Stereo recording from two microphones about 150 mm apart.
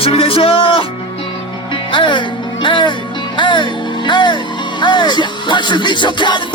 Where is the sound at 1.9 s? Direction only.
35° left (ahead or behind).